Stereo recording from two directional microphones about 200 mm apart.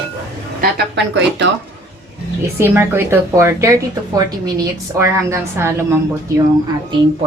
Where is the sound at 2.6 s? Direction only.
10° right (ahead or behind).